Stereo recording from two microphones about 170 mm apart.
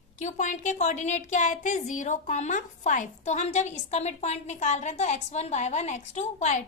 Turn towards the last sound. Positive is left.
turn(degrees=45)  # may be behind; listen again after turning